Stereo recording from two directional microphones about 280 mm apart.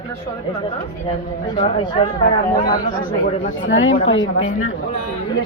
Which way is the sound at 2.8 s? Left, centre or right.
Left.